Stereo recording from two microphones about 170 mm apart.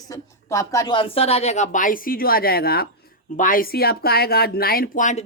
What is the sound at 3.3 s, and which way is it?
Speech, 50° left (ahead or behind).